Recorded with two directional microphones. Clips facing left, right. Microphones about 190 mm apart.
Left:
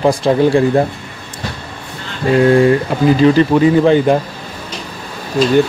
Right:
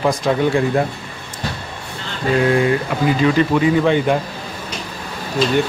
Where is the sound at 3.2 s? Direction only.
35° left (ahead or behind).